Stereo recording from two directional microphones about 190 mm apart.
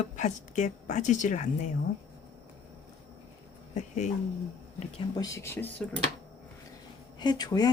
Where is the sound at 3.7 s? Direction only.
40° left (ahead or behind).